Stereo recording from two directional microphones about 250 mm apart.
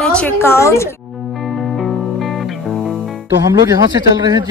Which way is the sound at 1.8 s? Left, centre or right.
Centre.